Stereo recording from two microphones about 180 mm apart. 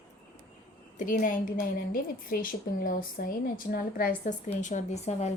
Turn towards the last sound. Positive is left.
turn(degrees=40)  # may be behind; listen again after turning